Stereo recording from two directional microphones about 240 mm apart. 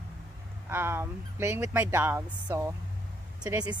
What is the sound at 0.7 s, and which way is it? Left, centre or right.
Speech, centre.